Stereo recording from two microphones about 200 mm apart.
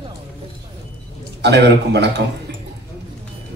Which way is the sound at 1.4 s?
60° right (ahead or behind).